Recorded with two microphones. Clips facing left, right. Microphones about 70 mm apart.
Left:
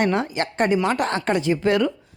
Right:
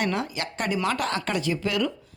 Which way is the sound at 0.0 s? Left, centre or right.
Left.